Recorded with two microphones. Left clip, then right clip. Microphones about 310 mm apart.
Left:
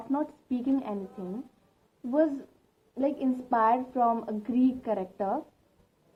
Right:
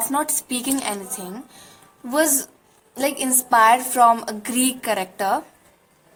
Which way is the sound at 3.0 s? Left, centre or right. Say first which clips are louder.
Right 6 dB; centre.